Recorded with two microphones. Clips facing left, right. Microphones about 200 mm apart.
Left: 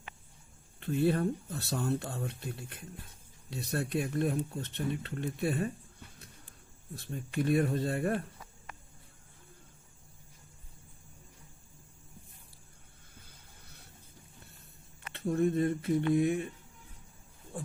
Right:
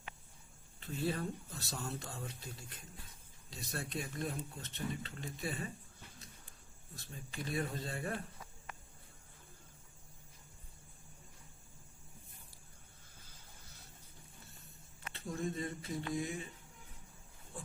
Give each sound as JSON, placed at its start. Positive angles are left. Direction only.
{"t": 0.8, "sound": "speech", "side_deg": 60}
{"t": 6.9, "sound": "speech", "side_deg": 60}
{"t": 13.1, "sound": "vehicle", "side_deg": 60}
{"t": 15.1, "sound": "speech", "side_deg": 60}